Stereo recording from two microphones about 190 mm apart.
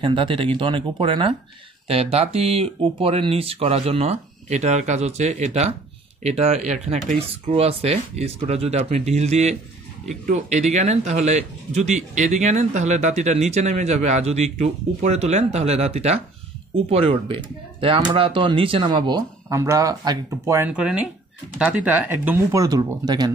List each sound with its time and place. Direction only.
0.0 s a man's voice: 25° right (ahead or behind)